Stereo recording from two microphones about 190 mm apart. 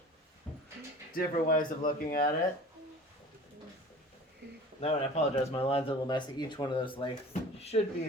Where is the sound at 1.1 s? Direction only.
45° left (ahead or behind).